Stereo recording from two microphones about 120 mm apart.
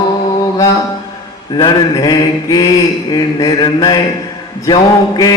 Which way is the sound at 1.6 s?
35° left (ahead or behind).